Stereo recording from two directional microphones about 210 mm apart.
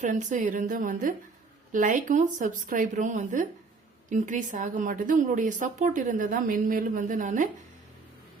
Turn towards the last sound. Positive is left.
turn(degrees=-40)  # may be behind; listen again after turning